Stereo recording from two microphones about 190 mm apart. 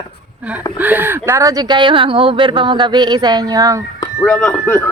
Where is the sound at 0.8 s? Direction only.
10° right (ahead or behind).